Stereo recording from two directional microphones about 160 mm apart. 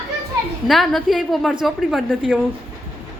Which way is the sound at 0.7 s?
Centre (ahead or behind).